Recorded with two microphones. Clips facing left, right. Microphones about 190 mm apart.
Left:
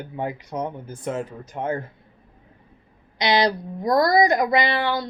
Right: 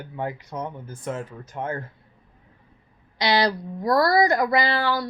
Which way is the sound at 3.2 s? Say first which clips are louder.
Left 1 dB; 20° left (ahead or behind).